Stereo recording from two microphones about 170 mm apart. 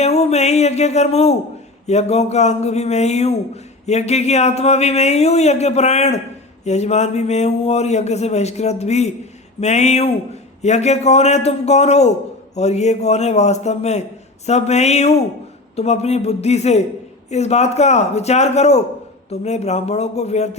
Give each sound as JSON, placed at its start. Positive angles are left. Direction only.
{"t": 0.0, "sound": "speech", "side_deg": 40}